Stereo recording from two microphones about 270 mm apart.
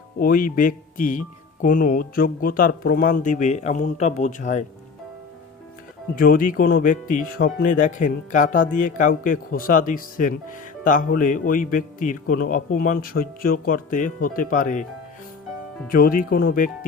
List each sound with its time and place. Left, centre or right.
0.2 s speech: left
6.1 s speech: left
15.9 s speech: left